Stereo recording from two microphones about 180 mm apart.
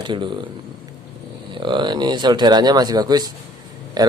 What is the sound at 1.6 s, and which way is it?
Speech, 25° right (ahead or behind).